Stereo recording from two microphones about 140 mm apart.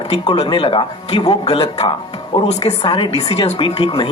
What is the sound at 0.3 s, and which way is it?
Speech, 40° left (ahead or behind).